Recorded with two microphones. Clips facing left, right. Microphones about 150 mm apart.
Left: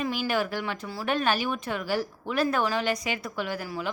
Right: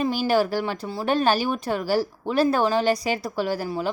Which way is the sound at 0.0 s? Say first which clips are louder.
Right 6 dB; 35° right (ahead or behind).